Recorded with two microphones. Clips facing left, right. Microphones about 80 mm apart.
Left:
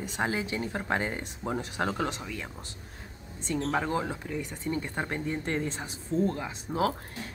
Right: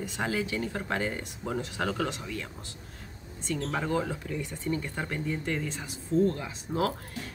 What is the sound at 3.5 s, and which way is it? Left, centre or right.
Speech, left.